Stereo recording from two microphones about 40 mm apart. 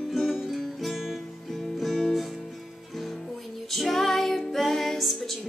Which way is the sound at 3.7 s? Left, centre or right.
Centre.